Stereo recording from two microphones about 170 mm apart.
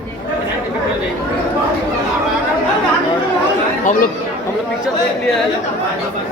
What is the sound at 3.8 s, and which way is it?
Speech, 50° left (ahead or behind).